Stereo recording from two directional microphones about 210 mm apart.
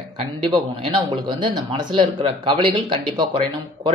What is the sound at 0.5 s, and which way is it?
Speech, 20° right (ahead or behind).